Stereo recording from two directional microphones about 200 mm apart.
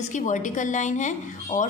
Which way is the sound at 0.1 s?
40° left (ahead or behind).